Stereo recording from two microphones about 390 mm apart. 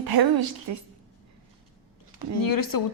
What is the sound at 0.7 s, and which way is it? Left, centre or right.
Speech, right.